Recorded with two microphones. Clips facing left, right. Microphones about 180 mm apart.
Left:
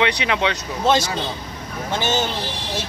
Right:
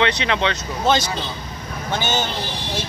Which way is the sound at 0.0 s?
10° left (ahead or behind).